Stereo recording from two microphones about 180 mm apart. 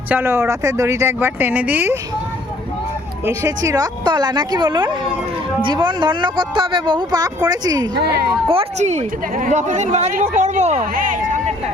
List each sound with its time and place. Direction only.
0.1 s speech: 15° right (ahead or behind)
3.2 s speech: 15° right (ahead or behind)
7.9 s speech: 60° right (ahead or behind)
8.4 s a woman's voice: 35° right (ahead or behind)